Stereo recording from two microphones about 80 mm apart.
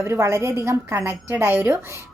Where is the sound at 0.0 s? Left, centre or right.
Right.